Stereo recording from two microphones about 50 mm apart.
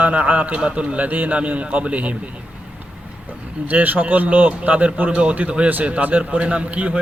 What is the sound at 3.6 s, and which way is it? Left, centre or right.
A man's voice, right.